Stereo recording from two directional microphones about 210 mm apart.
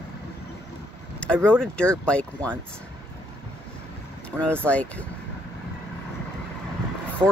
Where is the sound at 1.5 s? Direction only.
5° left (ahead or behind).